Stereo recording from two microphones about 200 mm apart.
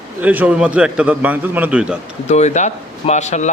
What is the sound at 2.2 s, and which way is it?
Speech, 35° left (ahead or behind).